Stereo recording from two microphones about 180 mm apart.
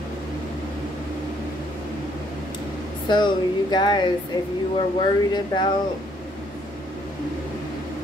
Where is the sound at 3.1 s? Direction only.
25° left (ahead or behind).